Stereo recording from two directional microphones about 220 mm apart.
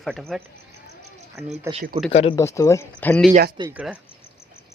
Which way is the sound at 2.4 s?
15° left (ahead or behind).